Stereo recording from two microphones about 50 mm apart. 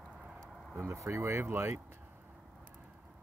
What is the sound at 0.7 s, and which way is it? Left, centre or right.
Speech, right.